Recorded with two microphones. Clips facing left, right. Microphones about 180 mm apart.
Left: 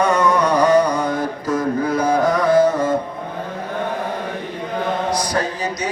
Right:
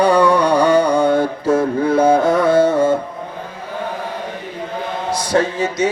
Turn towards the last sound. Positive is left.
turn(degrees=-25)  # may be behind; listen again after turning